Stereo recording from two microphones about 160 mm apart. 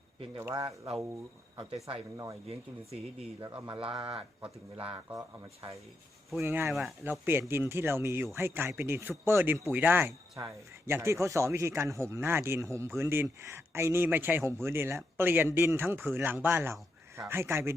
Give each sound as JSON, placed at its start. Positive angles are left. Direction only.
{"t": 0.3, "sound": "speech", "side_deg": -20}
{"t": 1.5, "sound": "speech", "side_deg": -35}
{"t": 3.4, "sound": "speech", "side_deg": -30}
{"t": 5.6, "sound": "speech", "side_deg": -35}
{"t": 6.4, "sound": "speech", "side_deg": -15}